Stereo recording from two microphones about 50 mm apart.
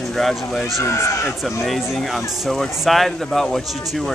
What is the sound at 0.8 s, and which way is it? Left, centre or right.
Speech, left.